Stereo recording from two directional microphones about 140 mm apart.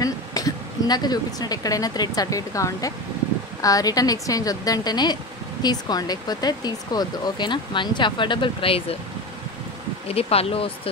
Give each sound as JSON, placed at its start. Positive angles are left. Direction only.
{"t": 0.0, "sound": "a woman's voice", "side_deg": 25}
{"t": 10.0, "sound": "speech", "side_deg": 45}